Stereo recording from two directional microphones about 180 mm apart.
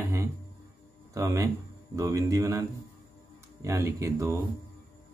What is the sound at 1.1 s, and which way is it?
Speech, 15° right (ahead or behind).